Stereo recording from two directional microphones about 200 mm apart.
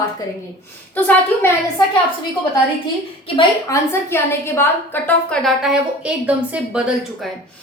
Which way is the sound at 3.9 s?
10° left (ahead or behind).